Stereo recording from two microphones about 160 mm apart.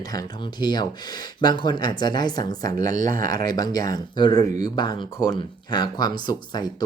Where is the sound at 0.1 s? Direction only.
25° left (ahead or behind).